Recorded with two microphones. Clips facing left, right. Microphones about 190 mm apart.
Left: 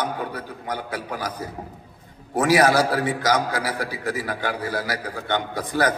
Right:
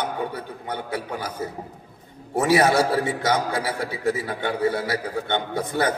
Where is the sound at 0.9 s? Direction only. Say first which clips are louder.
Even; 65° left (ahead or behind).